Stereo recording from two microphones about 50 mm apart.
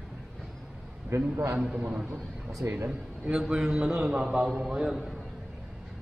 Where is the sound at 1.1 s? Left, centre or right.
Right.